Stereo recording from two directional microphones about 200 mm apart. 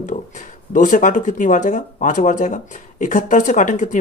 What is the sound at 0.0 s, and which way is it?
Speech, 40° left (ahead or behind).